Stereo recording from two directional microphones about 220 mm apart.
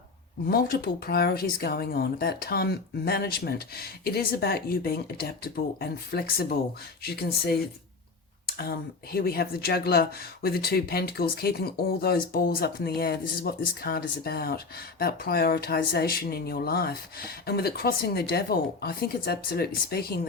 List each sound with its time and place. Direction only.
0.4 s speech: 45° left (ahead or behind)